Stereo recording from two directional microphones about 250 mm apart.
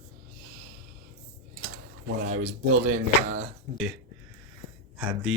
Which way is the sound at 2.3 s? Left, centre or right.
Right.